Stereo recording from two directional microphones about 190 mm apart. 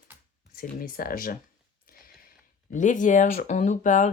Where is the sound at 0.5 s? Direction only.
50° left (ahead or behind).